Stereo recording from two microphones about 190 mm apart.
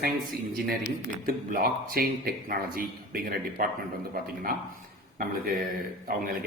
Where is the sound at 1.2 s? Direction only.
50° right (ahead or behind).